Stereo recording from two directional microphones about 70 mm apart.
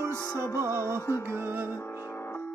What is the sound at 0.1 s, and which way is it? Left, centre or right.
Music, left.